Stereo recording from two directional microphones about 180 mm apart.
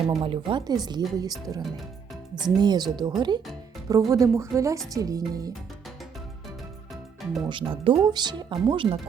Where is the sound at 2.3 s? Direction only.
25° right (ahead or behind).